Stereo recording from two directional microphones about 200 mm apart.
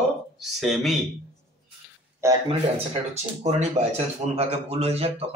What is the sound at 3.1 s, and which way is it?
Speech, 35° right (ahead or behind).